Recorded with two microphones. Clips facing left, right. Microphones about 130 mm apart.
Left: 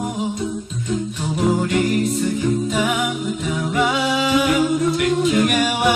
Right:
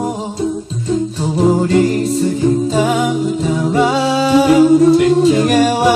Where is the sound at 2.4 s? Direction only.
30° right (ahead or behind).